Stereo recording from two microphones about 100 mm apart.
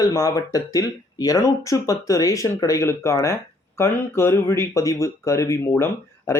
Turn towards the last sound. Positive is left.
turn(degrees=30)  # may be behind; listen again after turning